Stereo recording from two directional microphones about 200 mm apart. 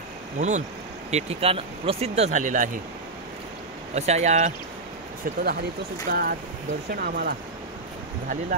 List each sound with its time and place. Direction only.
0.4 s speech: 35° right (ahead or behind)
3.9 s speech: 35° right (ahead or behind)
5.2 s speech: 50° right (ahead or behind)